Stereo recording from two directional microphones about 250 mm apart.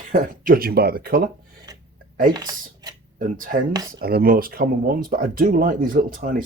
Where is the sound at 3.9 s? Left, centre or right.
Right.